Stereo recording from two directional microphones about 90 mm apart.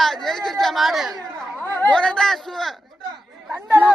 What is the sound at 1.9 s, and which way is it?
Speech, 10° left (ahead or behind).